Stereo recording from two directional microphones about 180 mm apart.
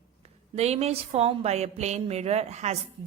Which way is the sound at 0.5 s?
35° right (ahead or behind).